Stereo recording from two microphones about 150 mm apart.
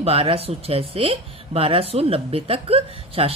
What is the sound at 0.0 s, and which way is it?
Speech, 40° right (ahead or behind).